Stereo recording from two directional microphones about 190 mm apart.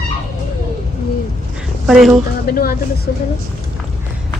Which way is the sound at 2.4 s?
50° left (ahead or behind).